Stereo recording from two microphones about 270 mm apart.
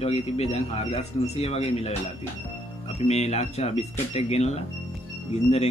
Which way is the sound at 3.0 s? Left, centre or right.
Left.